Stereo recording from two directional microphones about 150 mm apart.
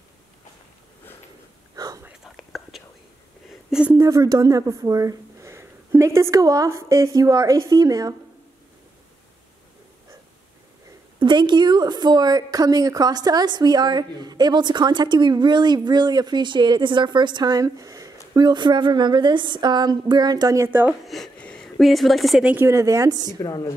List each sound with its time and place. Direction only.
2.2 s whispering: centre (ahead or behind)
3.7 s a sound: 10° right (ahead or behind)
4.0 s a woman's voice: 25° right (ahead or behind)
11.1 s a woman's voice: 30° right (ahead or behind); by 20.9 s 15° right (ahead or behind)
21.0 s speech: centre (ahead or behind)
22.7 s a woman's voice: 20° right (ahead or behind)
23.4 s a woman's voice: 25° left (ahead or behind)